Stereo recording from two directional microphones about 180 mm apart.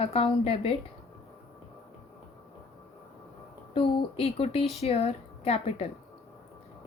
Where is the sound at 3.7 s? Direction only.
30° left (ahead or behind).